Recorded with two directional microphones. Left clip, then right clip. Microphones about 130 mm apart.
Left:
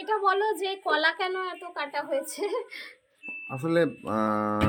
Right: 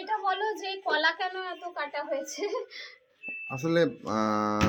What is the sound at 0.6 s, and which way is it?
A woman's voice, 90° left.